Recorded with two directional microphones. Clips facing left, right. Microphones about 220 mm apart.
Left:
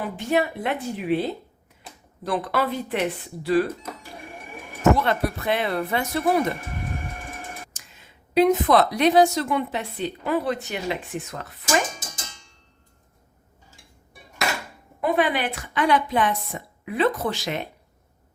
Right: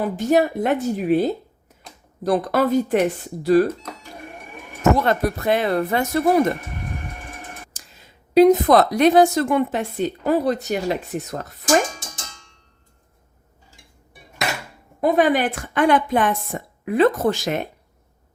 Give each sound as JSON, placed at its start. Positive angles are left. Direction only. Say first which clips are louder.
{"t": 0.0, "sound": "a woman's voice", "louder": "right 5 dB", "side_deg": -40}
{"t": 4.9, "sound": "a woman's voice", "louder": "right 4 dB", "side_deg": -45}
{"t": 7.7, "sound": "a woman's voice", "louder": "right 2 dB", "side_deg": -40}
{"t": 15.0, "sound": "a woman's voice", "louder": "right 5 dB", "side_deg": -45}